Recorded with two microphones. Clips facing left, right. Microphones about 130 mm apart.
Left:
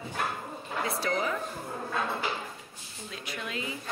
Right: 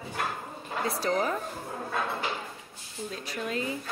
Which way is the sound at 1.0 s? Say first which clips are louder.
Right 3 dB; 40° right (ahead or behind).